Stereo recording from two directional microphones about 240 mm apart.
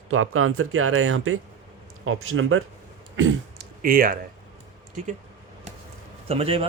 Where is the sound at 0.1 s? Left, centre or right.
Right.